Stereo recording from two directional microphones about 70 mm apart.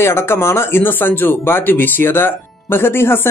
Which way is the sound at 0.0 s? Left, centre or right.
Left.